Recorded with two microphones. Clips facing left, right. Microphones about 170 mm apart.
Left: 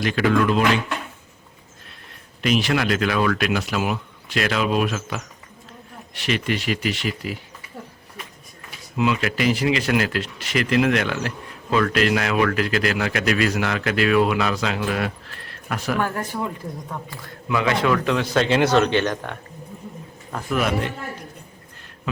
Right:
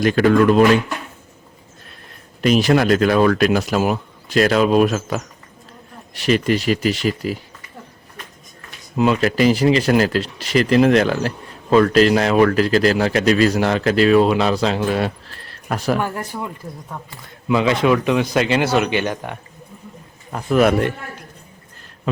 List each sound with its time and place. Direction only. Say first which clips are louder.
0.0 s speech: right 6 dB; 45° right (ahead or behind)
2.4 s speech: right 6 dB; 40° right (ahead or behind)
9.0 s speech: right 6 dB; 40° right (ahead or behind)
16.0 s a man's voice: even; 15° right (ahead or behind)
17.1 s a man's voice: right 7 dB; 20° right (ahead or behind)
18.4 s a man's voice: even; 5° right (ahead or behind)
20.6 s speech: right 8 dB; 50° right (ahead or behind)